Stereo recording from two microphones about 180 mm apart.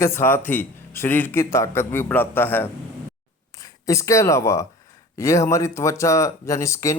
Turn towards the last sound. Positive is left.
turn(degrees=15)  # may be behind; listen again after turning